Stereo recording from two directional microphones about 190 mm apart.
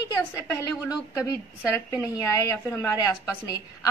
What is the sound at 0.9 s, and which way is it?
A woman's voice, 15° left (ahead or behind).